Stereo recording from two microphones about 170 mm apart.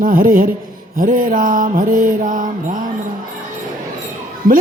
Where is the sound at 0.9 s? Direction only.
50° right (ahead or behind).